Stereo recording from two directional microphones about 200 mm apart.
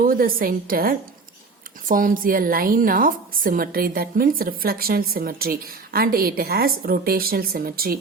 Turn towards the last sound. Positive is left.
turn(degrees=-50)  # may be behind; listen again after turning